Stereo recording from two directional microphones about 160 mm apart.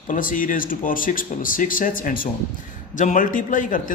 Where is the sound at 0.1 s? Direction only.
55° left (ahead or behind).